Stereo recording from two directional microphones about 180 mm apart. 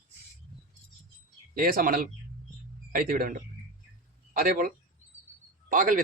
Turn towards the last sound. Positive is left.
turn(degrees=-50)  # may be behind; listen again after turning